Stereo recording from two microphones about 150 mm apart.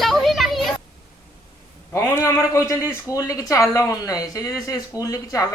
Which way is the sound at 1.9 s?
20° left (ahead or behind).